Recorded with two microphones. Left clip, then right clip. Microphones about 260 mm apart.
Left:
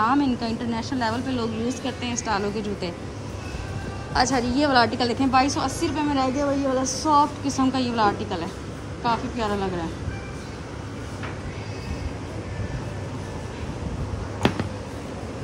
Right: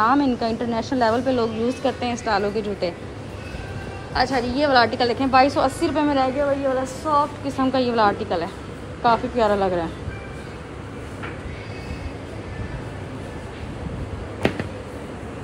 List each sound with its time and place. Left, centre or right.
0.0 s a woman's voice: centre
4.1 s a woman's voice: centre
7.0 s a woman's voice: left; by 9.8 s centre